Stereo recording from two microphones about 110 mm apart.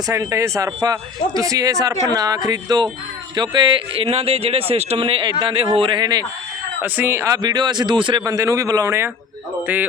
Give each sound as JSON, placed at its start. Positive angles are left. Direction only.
{"t": 0.1, "sound": "speech", "side_deg": -25}
{"t": 6.8, "sound": "speech", "side_deg": -20}
{"t": 7.4, "sound": "a man's voice", "side_deg": -40}
{"t": 8.2, "sound": "speech", "side_deg": -30}